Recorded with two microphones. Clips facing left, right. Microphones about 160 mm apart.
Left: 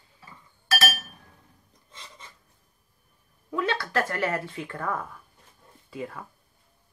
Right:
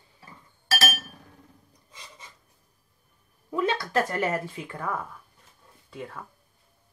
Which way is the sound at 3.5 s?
20° right (ahead or behind).